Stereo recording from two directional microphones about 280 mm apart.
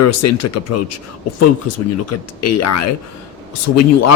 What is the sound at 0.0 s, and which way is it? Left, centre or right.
Speech, left.